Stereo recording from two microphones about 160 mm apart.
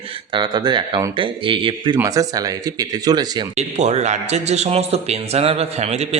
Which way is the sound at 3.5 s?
45° right (ahead or behind).